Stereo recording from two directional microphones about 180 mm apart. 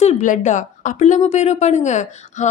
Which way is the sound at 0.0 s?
40° left (ahead or behind).